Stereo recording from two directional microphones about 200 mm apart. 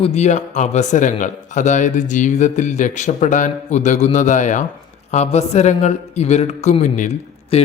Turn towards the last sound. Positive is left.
turn(degrees=35)  # may be behind; listen again after turning